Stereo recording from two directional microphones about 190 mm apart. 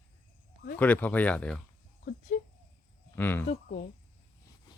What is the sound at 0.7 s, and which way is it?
Speech, 10° left (ahead or behind).